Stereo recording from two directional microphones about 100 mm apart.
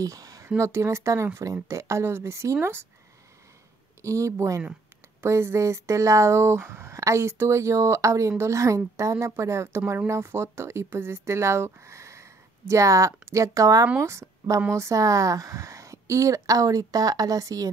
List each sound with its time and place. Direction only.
0.0 s a sound: 35° right (ahead or behind)
0.6 s speech: 30° right (ahead or behind)
4.0 s speech: 30° right (ahead or behind)